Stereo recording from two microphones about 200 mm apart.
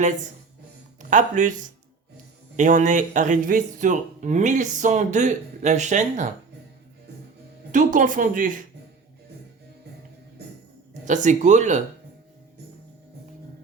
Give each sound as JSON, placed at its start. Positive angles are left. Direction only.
{"t": 1.1, "sound": "speech", "side_deg": -40}
{"t": 7.7, "sound": "speech", "side_deg": -40}
{"t": 11.0, "sound": "speech", "side_deg": -40}